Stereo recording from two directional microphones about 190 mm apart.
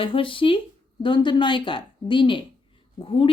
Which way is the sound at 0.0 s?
25° left (ahead or behind).